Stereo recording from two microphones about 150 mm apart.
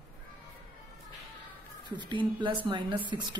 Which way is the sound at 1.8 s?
30° right (ahead or behind).